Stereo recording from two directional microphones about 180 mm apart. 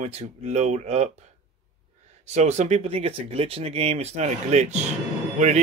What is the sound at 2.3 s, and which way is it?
Speech, 40° right (ahead or behind).